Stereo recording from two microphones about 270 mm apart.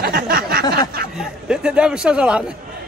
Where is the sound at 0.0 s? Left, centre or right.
Right.